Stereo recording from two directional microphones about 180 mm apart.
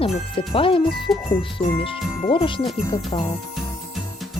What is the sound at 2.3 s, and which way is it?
Speech, 30° left (ahead or behind).